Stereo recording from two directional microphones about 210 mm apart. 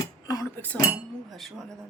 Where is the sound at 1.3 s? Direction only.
Centre (ahead or behind).